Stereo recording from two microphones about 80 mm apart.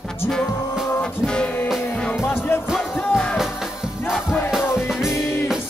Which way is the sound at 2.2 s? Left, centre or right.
Left.